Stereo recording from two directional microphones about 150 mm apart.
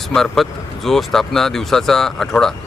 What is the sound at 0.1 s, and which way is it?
Speech, centre (ahead or behind).